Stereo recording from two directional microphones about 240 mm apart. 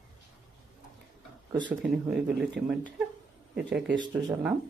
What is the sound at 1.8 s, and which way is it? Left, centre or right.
Speech, centre.